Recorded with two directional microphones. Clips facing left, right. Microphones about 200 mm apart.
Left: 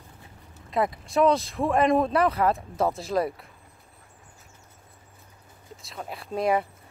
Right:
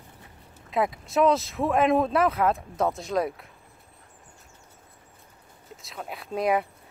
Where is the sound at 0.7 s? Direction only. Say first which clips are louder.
Even; centre (ahead or behind).